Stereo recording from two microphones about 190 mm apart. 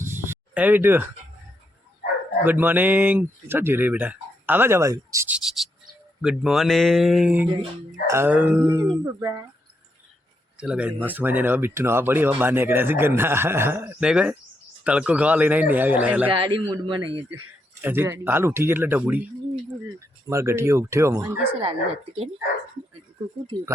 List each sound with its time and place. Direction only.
0.0 s a sound: 10° right (ahead or behind)
2.4 s speech: 10° right (ahead or behind)
10.6 s speech: 5° right (ahead or behind)
16.3 s a man's voice: 25° right (ahead or behind)
17.7 s speech: 10° right (ahead or behind)
20.3 s speech: 15° right (ahead or behind)
21.6 s a man's voice: 30° right (ahead or behind)